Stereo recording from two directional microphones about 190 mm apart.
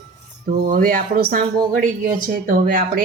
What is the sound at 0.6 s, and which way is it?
Speech, 45° right (ahead or behind).